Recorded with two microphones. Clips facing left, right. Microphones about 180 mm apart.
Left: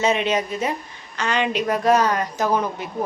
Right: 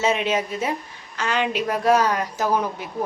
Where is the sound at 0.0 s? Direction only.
5° right (ahead or behind).